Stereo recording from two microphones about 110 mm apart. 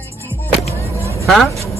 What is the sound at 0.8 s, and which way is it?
Vehicle, 25° left (ahead or behind).